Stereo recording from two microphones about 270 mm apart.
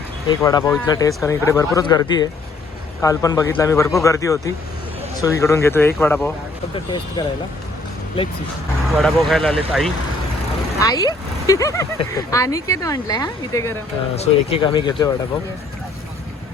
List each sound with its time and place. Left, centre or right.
0.3 s speech: centre
9.0 s speech: centre
10.8 s speech: centre